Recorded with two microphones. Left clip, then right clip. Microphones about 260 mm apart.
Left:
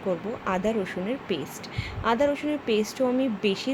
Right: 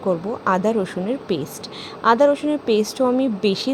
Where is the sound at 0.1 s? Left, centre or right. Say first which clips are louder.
Right 8 dB; centre.